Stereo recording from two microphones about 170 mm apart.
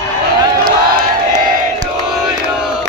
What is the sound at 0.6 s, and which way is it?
Crowd, 55° right (ahead or behind).